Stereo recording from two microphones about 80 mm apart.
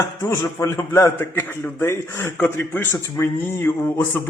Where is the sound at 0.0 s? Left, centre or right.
Left.